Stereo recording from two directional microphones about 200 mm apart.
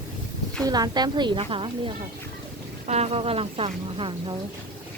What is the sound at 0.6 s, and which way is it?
Speech, 20° right (ahead or behind).